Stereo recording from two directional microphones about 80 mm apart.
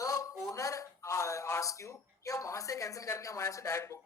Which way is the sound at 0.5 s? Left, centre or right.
Left.